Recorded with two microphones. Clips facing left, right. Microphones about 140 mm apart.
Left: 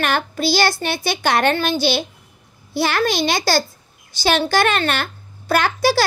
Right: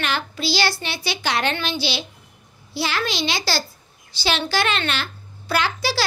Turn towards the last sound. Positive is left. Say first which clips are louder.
# left 6 dB
turn(degrees=50)  # may be behind; listen again after turning